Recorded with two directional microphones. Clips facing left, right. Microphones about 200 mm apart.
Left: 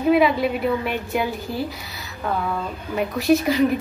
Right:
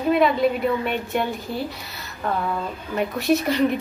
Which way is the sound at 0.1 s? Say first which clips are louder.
Even; 5° left (ahead or behind).